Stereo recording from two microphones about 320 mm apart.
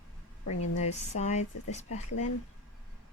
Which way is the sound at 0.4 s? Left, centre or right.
Left.